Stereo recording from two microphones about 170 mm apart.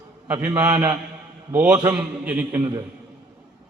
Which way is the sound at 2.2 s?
10° right (ahead or behind).